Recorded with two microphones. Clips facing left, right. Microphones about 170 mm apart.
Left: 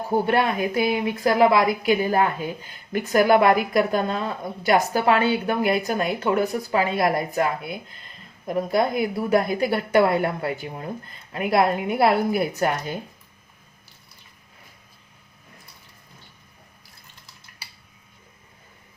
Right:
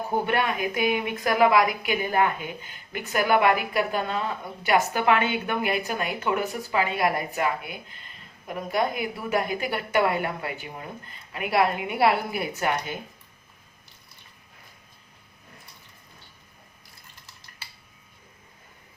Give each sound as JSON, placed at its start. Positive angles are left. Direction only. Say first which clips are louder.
{"t": 0.3, "sound": "a woman's voice", "louder": "left 4 dB", "side_deg": 35}